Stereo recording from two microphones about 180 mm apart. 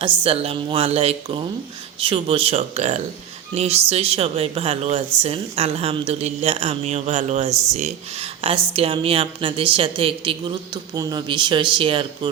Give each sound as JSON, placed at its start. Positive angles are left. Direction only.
{"t": 0.2, "sound": "a woman's voice", "side_deg": -35}